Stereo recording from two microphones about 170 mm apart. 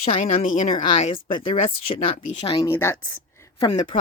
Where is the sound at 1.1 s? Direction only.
30° left (ahead or behind).